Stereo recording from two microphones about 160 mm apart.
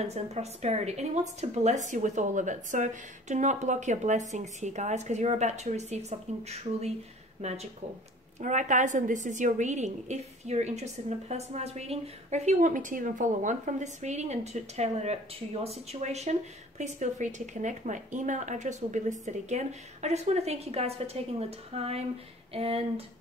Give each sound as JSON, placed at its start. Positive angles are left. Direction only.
{"t": 0.0, "sound": "a woman's voice", "side_deg": -45}
{"t": 7.4, "sound": "a woman's voice", "side_deg": -45}